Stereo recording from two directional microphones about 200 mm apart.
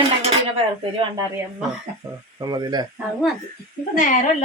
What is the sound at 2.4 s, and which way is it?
Speech, 20° right (ahead or behind).